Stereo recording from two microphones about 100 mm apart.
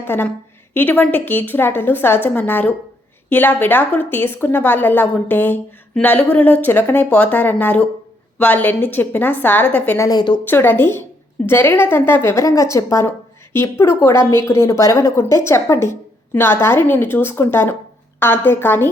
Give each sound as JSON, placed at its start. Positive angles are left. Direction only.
{"t": 0.0, "sound": "a woman's voice", "side_deg": 20}
{"t": 10.0, "sound": "a woman's voice", "side_deg": 40}
{"t": 10.4, "sound": "speech", "side_deg": 20}